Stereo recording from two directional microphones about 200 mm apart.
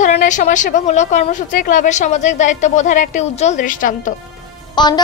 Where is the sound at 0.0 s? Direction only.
40° left (ahead or behind).